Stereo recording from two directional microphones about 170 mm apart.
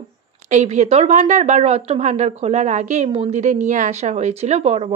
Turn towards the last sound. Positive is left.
turn(degrees=-40)  # may be behind; listen again after turning